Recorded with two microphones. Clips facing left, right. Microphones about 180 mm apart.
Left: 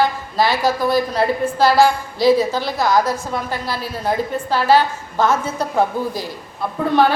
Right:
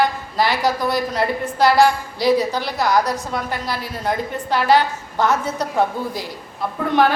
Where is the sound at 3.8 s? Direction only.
20° right (ahead or behind).